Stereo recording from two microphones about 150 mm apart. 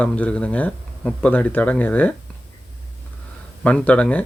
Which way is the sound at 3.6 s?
10° left (ahead or behind).